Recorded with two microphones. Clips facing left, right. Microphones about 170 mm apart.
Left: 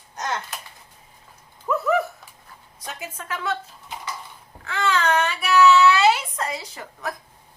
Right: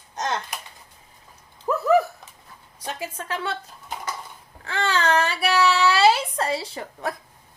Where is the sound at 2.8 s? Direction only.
30° right (ahead or behind).